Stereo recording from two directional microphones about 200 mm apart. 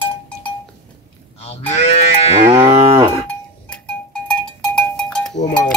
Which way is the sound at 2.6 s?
30° right (ahead or behind).